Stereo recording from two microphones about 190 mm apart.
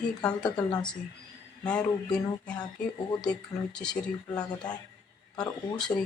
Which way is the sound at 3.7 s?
5° left (ahead or behind).